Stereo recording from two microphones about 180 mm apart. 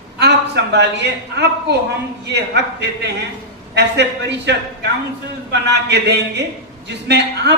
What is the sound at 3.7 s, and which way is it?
A man's voice, 70° right (ahead or behind).